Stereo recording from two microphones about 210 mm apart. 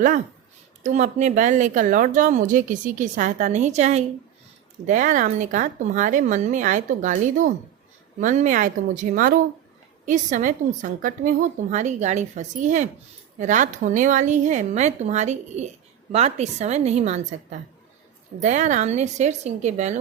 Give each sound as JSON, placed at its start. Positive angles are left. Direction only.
{"t": 0.8, "sound": "speech", "side_deg": -35}
{"t": 18.3, "sound": "speech", "side_deg": -35}